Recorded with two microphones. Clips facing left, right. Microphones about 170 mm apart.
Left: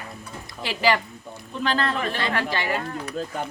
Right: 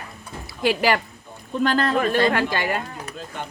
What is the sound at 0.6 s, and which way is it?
A man's voice, 50° right (ahead or behind).